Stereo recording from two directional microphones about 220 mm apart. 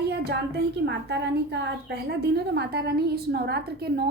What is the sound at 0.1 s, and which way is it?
A woman's voice, 50° right (ahead or behind).